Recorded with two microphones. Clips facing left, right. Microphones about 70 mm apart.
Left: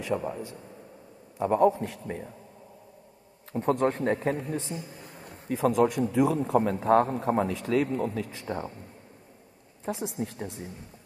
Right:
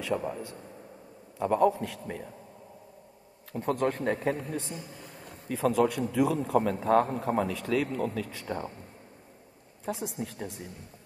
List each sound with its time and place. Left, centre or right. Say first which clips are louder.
0.2 s a man's voice: left 1 dB; centre
3.5 s a man's voice: left 3 dB; left
9.8 s a man's voice: left 2 dB; left
10.1 s a woman's voice: left 3 dB; left